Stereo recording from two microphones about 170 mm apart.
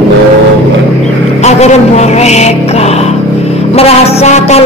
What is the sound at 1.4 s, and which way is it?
Music, 40° left (ahead or behind).